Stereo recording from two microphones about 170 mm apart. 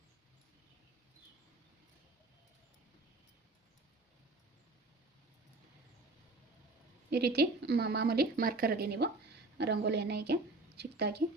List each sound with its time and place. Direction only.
7.1 s a woman's voice: 70° right (ahead or behind)
9.6 s a woman's voice: 80° right